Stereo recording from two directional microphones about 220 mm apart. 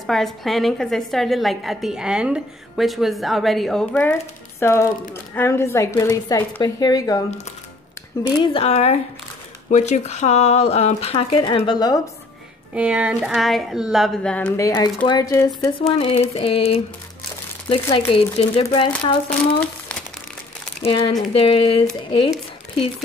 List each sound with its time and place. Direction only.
0.0 s a woman's voice: centre (ahead or behind); by 7.2 s 15° left (ahead or behind)
8.4 s speech: 25° left (ahead or behind)
12.7 s a woman's voice: 5° right (ahead or behind); by 16.1 s 15° left (ahead or behind)
16.1 s speech: 25° left (ahead or behind)
19.2 s speech: 5° left (ahead or behind)
21.2 s speech: 25° left (ahead or behind)